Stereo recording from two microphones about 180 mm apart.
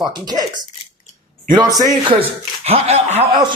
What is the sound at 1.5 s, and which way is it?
Speech, 20° right (ahead or behind).